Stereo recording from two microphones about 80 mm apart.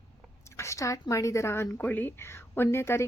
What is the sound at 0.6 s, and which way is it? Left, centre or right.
Speech, left.